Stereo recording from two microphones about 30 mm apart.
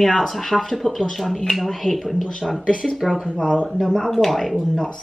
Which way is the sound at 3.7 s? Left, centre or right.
Centre.